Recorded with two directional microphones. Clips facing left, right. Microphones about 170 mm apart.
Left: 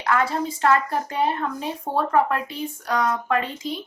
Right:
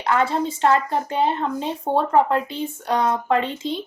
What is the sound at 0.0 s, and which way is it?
A woman's voice, 25° right (ahead or behind).